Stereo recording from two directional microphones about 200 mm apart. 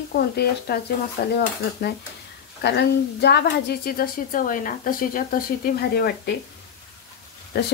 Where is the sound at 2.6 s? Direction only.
55° left (ahead or behind).